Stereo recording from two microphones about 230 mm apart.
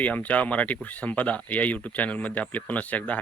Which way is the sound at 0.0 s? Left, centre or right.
Centre.